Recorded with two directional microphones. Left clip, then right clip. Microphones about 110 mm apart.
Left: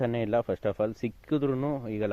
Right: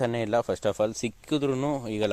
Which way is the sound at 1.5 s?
30° right (ahead or behind).